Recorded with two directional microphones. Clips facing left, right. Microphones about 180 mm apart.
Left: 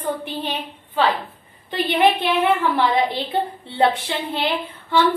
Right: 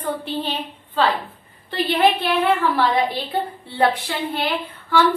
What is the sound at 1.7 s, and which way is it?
A woman's voice, 20° left (ahead or behind).